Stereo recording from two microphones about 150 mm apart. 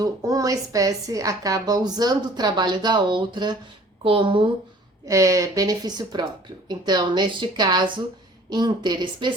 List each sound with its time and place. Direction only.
0.0 s a woman's voice: 20° right (ahead or behind)
5.0 s a woman's voice: 20° right (ahead or behind)